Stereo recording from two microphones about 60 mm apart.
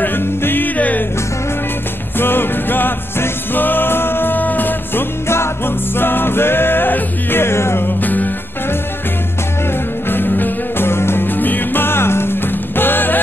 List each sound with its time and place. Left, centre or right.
0.0 s music: left
2.1 s music: left
8.0 s music: left
10.0 s music: left